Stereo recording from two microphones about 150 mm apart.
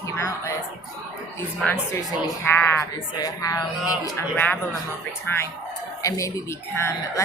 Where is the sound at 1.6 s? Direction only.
10° left (ahead or behind).